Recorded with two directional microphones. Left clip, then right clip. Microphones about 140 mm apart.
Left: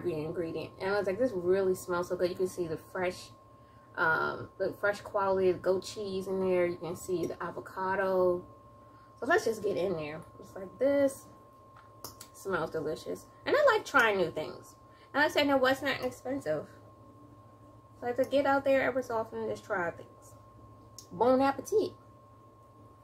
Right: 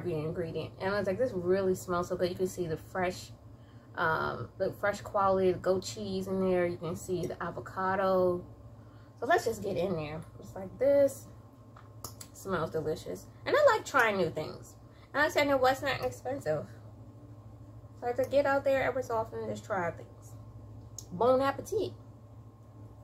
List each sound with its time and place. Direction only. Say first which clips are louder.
0.0 s a woman's voice: left 1 dB; 25° left (ahead or behind)
9.2 s a woman's voice: even; 20° left (ahead or behind)
12.4 s a woman's voice: even; 20° left (ahead or behind)
18.0 s a woman's voice: even; 20° left (ahead or behind)
20.9 s a woman's voice: even; 25° left (ahead or behind)